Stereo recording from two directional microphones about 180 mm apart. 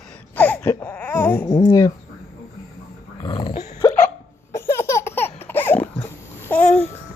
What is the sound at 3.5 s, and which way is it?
Dog, 35° left (ahead or behind).